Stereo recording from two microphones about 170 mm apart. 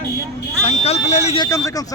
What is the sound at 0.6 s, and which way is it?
Speech, 40° left (ahead or behind).